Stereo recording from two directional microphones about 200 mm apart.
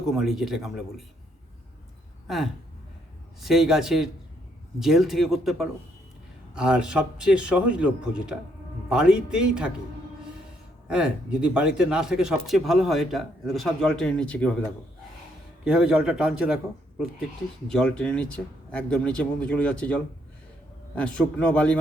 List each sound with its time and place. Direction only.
0.1 s speech: centre (ahead or behind)
2.2 s speech: centre (ahead or behind)
10.8 s speech: 5° right (ahead or behind)
15.8 s speech: 5° right (ahead or behind)
17.7 s speech: 5° left (ahead or behind)